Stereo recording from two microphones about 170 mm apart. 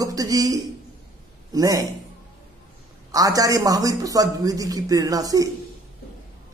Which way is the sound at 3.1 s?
20° right (ahead or behind).